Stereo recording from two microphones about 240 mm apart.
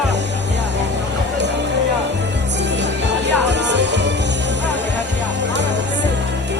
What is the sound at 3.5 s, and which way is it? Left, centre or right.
Music, right.